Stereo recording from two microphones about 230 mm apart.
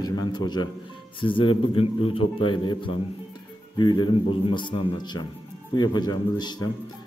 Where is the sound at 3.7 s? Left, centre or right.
Centre.